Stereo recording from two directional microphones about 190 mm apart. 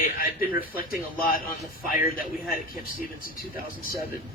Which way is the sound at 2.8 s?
50° left (ahead or behind).